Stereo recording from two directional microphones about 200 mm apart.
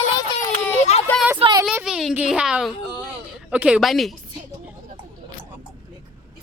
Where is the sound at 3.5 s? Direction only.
5° right (ahead or behind).